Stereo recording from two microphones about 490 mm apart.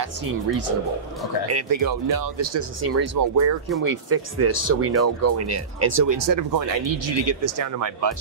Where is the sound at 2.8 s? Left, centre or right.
Right.